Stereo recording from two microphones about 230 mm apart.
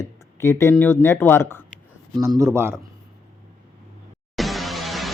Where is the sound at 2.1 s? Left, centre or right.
Centre.